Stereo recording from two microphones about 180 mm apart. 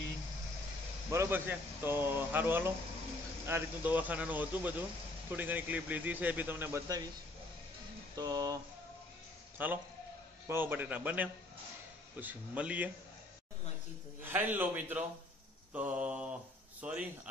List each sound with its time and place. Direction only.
1.1 s speech: 15° right (ahead or behind)
8.2 s speech: 20° right (ahead or behind)
9.6 s speech: 10° right (ahead or behind)
14.2 s speech: 10° right (ahead or behind)